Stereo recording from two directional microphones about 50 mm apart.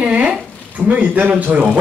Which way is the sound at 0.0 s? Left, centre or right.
Right.